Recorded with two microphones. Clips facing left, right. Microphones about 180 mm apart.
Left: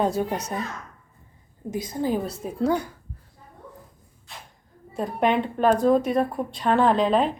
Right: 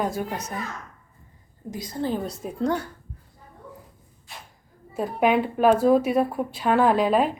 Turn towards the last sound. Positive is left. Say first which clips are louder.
# even
turn(degrees=-5)  # may be behind; listen again after turning